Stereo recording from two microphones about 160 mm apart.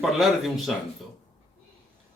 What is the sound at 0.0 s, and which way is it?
Speech, centre (ahead or behind).